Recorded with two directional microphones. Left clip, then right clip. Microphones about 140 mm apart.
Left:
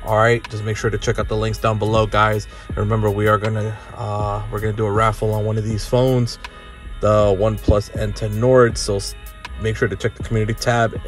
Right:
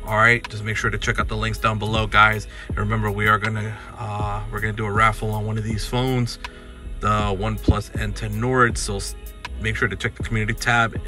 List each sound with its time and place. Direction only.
0.1 s speech: 25° left (ahead or behind)